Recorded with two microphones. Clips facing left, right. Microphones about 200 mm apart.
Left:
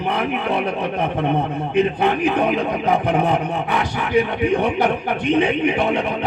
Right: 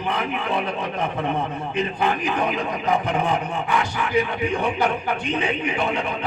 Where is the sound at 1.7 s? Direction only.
60° left (ahead or behind).